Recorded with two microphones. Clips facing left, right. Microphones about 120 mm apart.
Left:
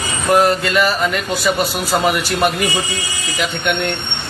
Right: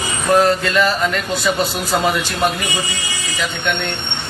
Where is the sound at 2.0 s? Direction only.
15° left (ahead or behind).